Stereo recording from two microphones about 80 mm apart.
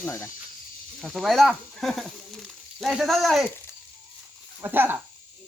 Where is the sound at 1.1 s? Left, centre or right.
Centre.